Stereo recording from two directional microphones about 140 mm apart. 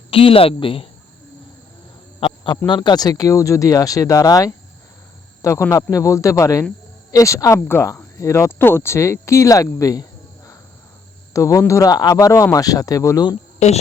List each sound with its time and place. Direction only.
0.1 s speech: 40° left (ahead or behind)
2.2 s a sound: 40° left (ahead or behind)
2.6 s speech: 35° left (ahead or behind)
13.6 s speech: 50° left (ahead or behind)